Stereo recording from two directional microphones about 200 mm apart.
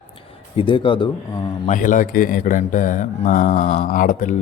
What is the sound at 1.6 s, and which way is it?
Speech, 40° left (ahead or behind).